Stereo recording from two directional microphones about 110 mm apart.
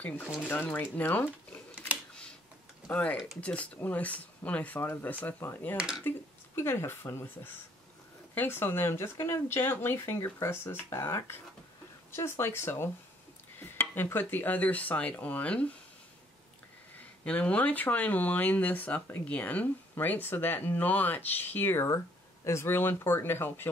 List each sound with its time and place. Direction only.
0.5 s speech: 15° left (ahead or behind)
2.9 s speech: 10° left (ahead or behind)
5.8 s speech: 5° right (ahead or behind)
6.0 s speech: 20° left (ahead or behind)
8.4 s speech: 20° left (ahead or behind)
17.2 s speech: 10° left (ahead or behind)
21.8 s speech: 30° left (ahead or behind)